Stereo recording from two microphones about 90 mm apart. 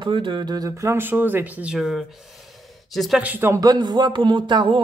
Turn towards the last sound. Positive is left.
turn(degrees=-60)  # may be behind; listen again after turning